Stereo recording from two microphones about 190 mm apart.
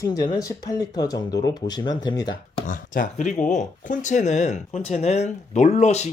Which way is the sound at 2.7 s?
45° left (ahead or behind).